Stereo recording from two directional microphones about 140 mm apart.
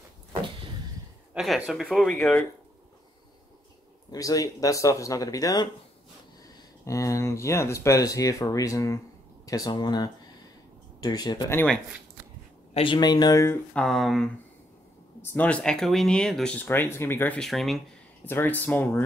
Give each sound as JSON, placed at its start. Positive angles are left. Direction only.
{"t": 1.3, "sound": "speech", "side_deg": 0}
{"t": 4.1, "sound": "speech", "side_deg": 25}
{"t": 12.7, "sound": "speech", "side_deg": 35}
{"t": 13.7, "sound": "speech", "side_deg": 0}
{"t": 17.4, "sound": "speech", "side_deg": 0}
{"t": 18.2, "sound": "speech", "side_deg": 15}